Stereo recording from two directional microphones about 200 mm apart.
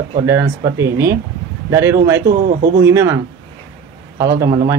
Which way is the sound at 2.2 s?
40° right (ahead or behind).